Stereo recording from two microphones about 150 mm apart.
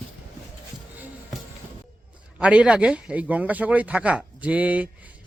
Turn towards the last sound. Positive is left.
turn(degrees=-10)  # may be behind; listen again after turning